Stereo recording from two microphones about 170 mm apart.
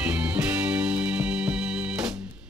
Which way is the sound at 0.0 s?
10° right (ahead or behind).